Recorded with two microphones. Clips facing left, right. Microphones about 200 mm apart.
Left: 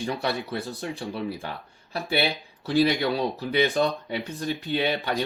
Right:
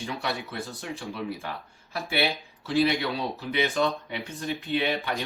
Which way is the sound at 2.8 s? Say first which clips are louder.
Left 3 dB; 40° left (ahead or behind).